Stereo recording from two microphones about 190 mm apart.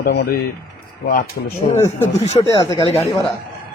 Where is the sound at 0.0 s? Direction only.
55° left (ahead or behind).